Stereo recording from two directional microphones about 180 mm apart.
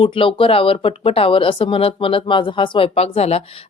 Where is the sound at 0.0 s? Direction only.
30° left (ahead or behind).